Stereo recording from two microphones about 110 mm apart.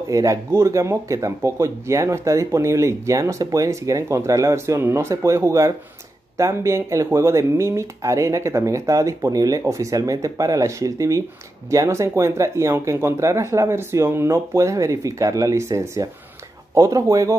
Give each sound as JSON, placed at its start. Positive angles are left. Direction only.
{"t": 0.1, "sound": "speech", "side_deg": -30}